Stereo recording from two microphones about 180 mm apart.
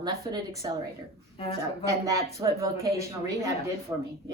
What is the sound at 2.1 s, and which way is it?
A woman's voice, 15° right (ahead or behind).